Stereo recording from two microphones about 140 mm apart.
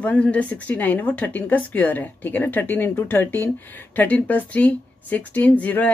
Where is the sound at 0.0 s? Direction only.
10° left (ahead or behind).